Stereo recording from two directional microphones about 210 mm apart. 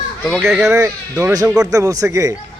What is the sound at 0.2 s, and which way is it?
Speech, centre (ahead or behind).